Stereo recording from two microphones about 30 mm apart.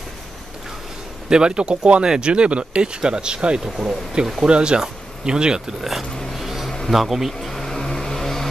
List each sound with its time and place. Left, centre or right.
1.3 s speech: right
4.5 s speech: right
4.7 s speech: right
5.8 s speech: centre
6.3 s a sound: centre
6.9 s speech: centre
7.4 s vehicle: centre